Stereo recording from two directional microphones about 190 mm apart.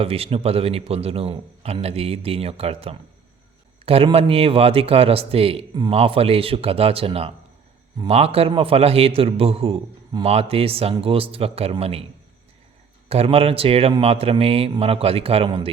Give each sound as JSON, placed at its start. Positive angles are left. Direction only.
{"t": 0.0, "sound": "a man's voice", "side_deg": -30}
{"t": 13.1, "sound": "a man's voice", "side_deg": -30}